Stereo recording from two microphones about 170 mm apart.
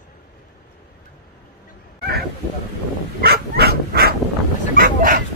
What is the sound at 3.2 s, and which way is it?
Dog, 65° right (ahead or behind).